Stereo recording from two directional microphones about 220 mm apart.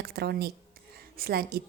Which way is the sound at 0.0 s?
45° right (ahead or behind).